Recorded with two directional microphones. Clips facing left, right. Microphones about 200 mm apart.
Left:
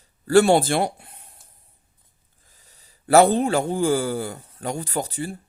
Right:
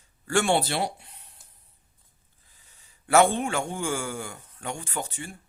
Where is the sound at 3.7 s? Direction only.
35° left (ahead or behind).